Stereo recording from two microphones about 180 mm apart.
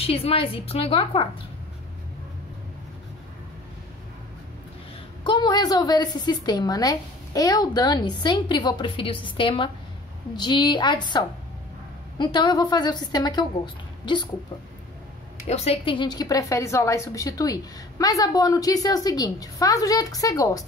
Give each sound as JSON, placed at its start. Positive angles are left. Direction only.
{"t": 0.0, "sound": "a woman's voice", "side_deg": 30}
{"t": 5.2, "sound": "a woman's voice", "side_deg": 25}
{"t": 15.4, "sound": "a woman's voice", "side_deg": 35}